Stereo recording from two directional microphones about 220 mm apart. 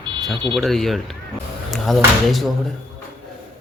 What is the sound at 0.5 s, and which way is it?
Speech, centre (ahead or behind).